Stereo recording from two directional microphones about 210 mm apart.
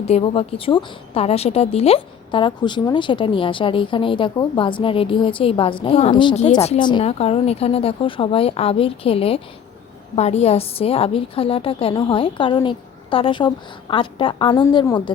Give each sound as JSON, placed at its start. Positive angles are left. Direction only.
{"t": 0.0, "sound": "a woman's voice", "side_deg": 25}